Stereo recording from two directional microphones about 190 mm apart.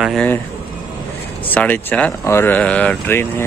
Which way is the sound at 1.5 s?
10° left (ahead or behind).